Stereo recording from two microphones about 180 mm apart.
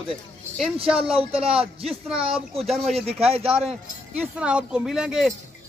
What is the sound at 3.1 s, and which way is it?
Speech, 35° right (ahead or behind).